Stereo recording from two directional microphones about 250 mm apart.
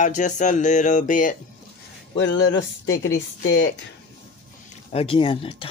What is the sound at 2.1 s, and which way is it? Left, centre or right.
Speech, left.